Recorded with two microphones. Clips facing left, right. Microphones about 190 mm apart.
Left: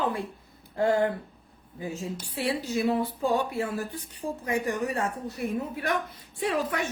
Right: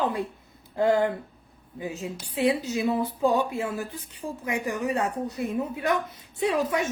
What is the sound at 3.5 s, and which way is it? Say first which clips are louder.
Speech: even; 15° right (ahead or behind).